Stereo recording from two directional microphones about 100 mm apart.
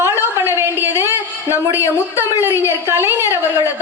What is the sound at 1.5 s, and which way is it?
A woman's voice, 30° left (ahead or behind).